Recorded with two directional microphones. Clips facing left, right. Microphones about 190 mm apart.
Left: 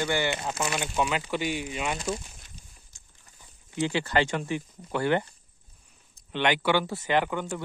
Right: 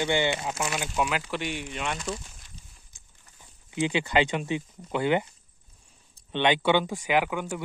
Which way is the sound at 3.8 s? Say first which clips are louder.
Right 1 dB; 15° right (ahead or behind).